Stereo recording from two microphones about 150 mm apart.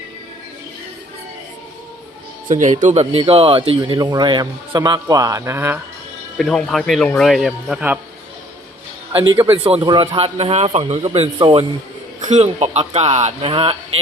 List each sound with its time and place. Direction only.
2.8 s speech: 45° right (ahead or behind); by 5.8 s 15° right (ahead or behind)
6.3 s speech: 5° left (ahead or behind)
9.1 s speech: 30° right (ahead or behind)
11.3 s speech: 30° right (ahead or behind)
12.2 s speech: 50° right (ahead or behind)